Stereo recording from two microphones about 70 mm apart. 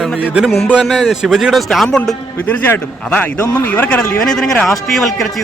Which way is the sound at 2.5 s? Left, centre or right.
Left.